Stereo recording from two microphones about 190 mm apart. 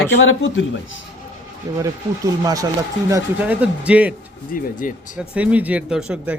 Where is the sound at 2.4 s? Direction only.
20° right (ahead or behind).